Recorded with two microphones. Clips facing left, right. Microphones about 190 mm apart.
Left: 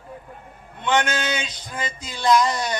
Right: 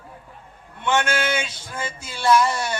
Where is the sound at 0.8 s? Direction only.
15° left (ahead or behind).